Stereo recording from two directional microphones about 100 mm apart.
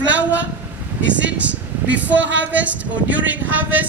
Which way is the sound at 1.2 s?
15° right (ahead or behind).